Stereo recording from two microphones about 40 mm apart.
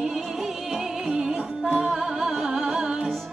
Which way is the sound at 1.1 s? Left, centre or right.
Centre.